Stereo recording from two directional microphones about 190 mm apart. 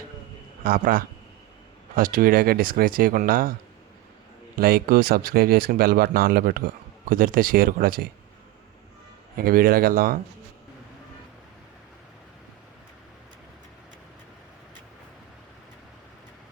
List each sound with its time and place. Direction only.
0.6 s speech: 50° right (ahead or behind)
4.5 s speech: 55° right (ahead or behind)
9.4 s speech: 50° right (ahead or behind)